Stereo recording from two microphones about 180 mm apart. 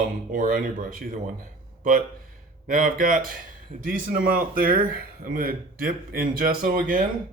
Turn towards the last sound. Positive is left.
turn(degrees=-50)  # may be behind; listen again after turning